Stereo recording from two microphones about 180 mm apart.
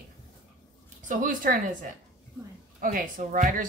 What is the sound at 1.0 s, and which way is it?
Speech, 50° right (ahead or behind).